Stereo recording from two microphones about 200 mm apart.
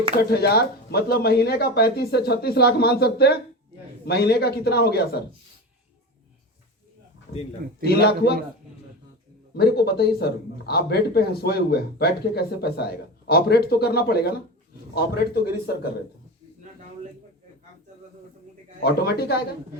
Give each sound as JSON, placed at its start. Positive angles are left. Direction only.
{"t": 0.2, "sound": "speech", "side_deg": 50}
{"t": 7.9, "sound": "speech", "side_deg": 50}
{"t": 9.6, "sound": "speech", "side_deg": 55}
{"t": 18.8, "sound": "speech", "side_deg": 50}